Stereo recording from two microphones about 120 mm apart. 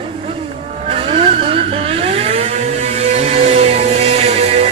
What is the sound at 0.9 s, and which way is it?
Vehicle, 55° right (ahead or behind).